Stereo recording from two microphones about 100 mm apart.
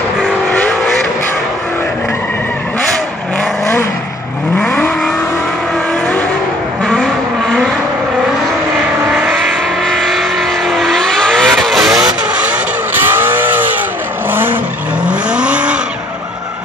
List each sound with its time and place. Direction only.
0.5 s vehicle: 15° left (ahead or behind)
4.6 s vehicle: 15° left (ahead or behind)
9.1 s vehicle: 5° right (ahead or behind)